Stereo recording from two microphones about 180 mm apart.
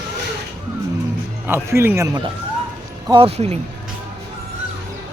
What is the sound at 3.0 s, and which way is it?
Speech, 30° right (ahead or behind).